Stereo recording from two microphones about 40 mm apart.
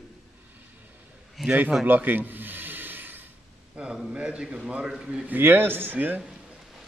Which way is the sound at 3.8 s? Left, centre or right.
Right.